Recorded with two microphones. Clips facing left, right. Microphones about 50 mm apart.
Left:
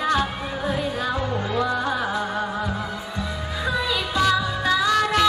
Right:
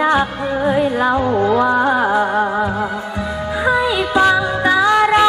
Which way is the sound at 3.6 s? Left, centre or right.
Right.